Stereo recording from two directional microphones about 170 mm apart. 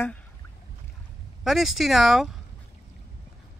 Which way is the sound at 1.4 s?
Centre (ahead or behind).